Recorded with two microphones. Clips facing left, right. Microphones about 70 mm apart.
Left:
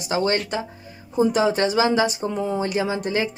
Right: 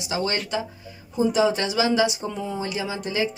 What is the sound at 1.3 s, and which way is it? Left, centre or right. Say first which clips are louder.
A woman's voice: even; left.